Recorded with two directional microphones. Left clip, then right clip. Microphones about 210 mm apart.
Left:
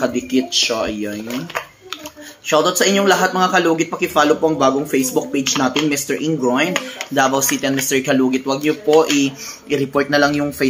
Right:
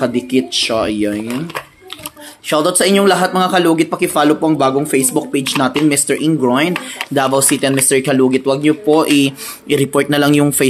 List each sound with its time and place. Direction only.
0.0 s speech: 40° right (ahead or behind)
2.4 s speech: 45° right (ahead or behind)